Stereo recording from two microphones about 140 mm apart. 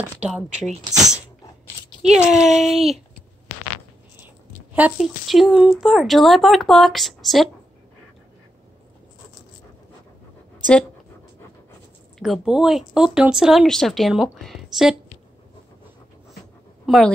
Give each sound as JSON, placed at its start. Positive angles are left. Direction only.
{"t": 0.8, "sound": "speech", "side_deg": -25}
{"t": 2.1, "sound": "speech", "side_deg": -5}
{"t": 4.7, "sound": "speech", "side_deg": -5}
{"t": 12.2, "sound": "speech", "side_deg": 0}
{"t": 16.8, "sound": "speech", "side_deg": 0}